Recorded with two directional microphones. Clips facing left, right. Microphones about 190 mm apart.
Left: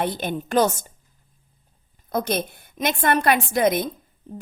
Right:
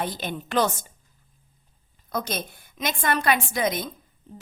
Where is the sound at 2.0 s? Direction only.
55° left (ahead or behind).